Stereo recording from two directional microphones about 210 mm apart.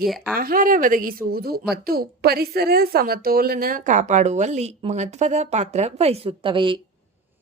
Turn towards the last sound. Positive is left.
turn(degrees=-25)  # may be behind; listen again after turning